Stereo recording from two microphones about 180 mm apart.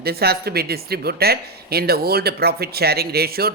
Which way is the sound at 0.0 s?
60° right (ahead or behind).